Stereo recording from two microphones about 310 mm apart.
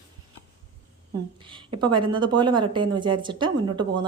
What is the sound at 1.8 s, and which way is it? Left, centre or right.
A woman's voice, centre.